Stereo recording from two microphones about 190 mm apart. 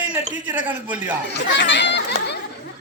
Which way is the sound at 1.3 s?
65° left (ahead or behind).